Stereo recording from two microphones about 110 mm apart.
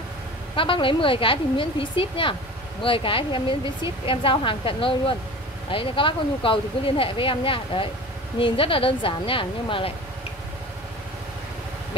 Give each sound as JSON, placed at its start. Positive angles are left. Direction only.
{"t": 0.6, "sound": "speech", "side_deg": 50}